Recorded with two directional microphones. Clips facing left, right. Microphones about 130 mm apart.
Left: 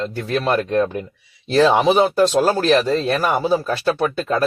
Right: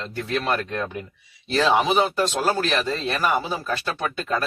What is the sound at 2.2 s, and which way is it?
A man's voice, 40° left (ahead or behind).